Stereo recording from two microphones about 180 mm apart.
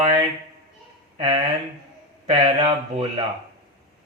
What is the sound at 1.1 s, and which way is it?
A man's voice, 20° right (ahead or behind).